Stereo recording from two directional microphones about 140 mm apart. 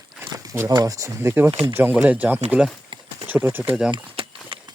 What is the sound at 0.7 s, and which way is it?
Speech, 25° right (ahead or behind).